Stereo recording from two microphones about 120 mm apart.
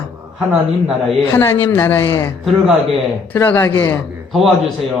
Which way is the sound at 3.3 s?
15° left (ahead or behind).